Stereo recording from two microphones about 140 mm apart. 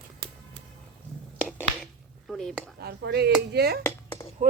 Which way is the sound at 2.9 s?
90° right.